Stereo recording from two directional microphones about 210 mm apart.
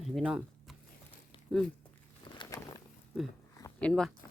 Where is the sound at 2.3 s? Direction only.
20° left (ahead or behind).